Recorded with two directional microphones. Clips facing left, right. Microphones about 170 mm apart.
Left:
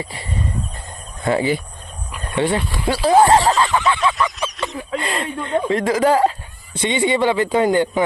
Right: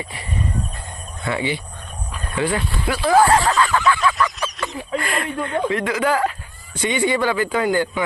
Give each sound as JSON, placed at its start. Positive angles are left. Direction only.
{"t": 0.0, "sound": "speech", "side_deg": 30}
{"t": 3.6, "sound": "a sound", "side_deg": 20}
{"t": 4.0, "sound": "honk", "side_deg": 0}
{"t": 4.9, "sound": "speech", "side_deg": 25}